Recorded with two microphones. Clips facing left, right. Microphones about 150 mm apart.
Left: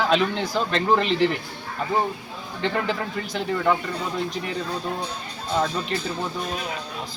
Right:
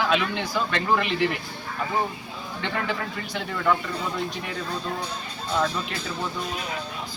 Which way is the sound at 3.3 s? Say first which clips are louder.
Left 2 dB; 25° left (ahead or behind).